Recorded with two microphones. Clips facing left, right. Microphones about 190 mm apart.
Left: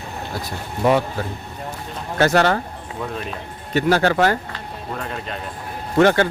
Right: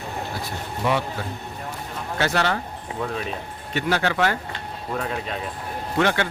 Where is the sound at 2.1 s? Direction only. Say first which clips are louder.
Left 7 dB; 45° left (ahead or behind).